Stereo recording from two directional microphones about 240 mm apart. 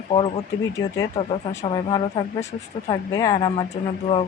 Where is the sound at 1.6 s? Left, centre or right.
Centre.